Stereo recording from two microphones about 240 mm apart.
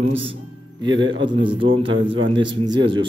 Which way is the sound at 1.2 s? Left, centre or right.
Centre.